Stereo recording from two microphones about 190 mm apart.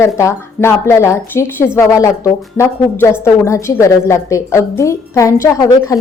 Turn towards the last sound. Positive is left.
turn(degrees=20)  # may be behind; listen again after turning